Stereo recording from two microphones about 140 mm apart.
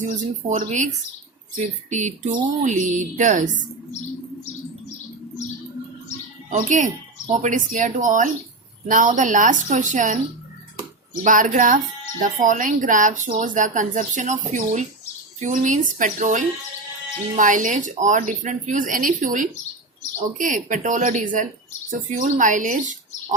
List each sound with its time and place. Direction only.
0.0 s speech: 60° right (ahead or behind)
1.9 s speech: 60° right (ahead or behind)
6.5 s speech: 60° right (ahead or behind)
11.2 s speech: 70° right (ahead or behind)